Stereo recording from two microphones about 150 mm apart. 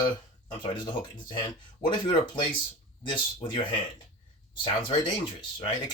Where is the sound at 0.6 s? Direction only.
35° left (ahead or behind).